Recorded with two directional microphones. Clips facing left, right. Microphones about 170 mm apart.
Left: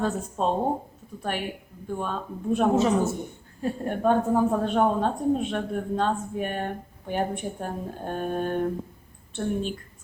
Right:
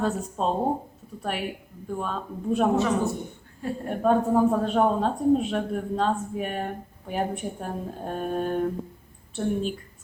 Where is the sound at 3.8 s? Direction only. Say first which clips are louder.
Right 1 dB; centre (ahead or behind).